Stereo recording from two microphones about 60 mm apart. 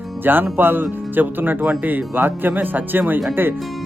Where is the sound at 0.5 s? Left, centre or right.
Right.